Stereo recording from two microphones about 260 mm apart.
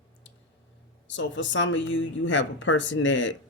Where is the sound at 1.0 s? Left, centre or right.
Left.